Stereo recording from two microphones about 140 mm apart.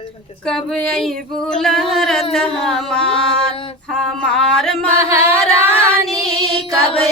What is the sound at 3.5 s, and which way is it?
Speech, 40° left (ahead or behind).